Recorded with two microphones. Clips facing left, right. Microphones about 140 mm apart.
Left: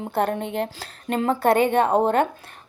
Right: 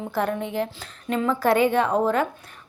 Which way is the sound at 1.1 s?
50° left (ahead or behind).